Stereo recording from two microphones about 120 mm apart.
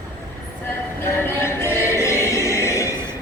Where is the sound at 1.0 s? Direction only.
20° left (ahead or behind).